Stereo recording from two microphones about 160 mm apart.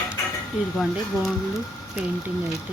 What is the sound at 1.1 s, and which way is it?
Speech, 20° right (ahead or behind).